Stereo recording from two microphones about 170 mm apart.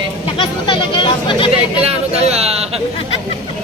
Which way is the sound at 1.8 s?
35° right (ahead or behind).